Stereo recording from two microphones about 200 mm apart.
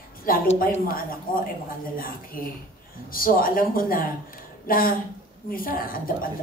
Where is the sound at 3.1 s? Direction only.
45° left (ahead or behind).